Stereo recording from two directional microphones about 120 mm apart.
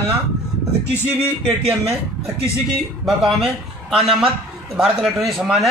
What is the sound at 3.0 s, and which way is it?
Speech, 5° right (ahead or behind).